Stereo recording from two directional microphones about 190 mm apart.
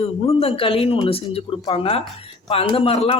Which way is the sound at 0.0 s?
30° left (ahead or behind).